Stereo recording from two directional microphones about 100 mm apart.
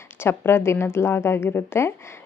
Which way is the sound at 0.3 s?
25° left (ahead or behind).